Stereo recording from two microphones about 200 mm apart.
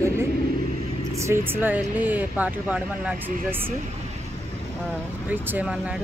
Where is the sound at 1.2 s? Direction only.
10° right (ahead or behind).